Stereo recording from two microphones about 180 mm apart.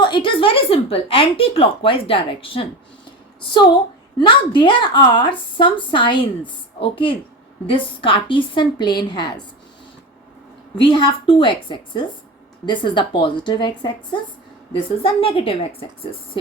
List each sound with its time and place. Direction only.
0.0 s a woman's voice: 25° left (ahead or behind)
4.2 s a woman's voice: 25° left (ahead or behind)
10.8 s a woman's voice: 30° left (ahead or behind)